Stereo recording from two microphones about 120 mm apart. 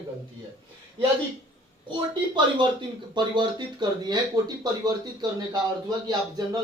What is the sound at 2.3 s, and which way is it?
Speech, 40° right (ahead or behind).